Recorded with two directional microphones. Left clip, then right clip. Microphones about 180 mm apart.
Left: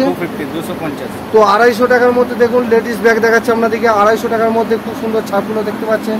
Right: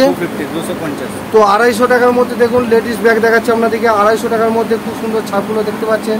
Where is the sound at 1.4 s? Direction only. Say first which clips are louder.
Even; 20° right (ahead or behind).